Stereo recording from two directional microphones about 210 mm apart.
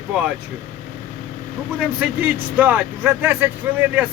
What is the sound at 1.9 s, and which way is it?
Speech, 10° right (ahead or behind).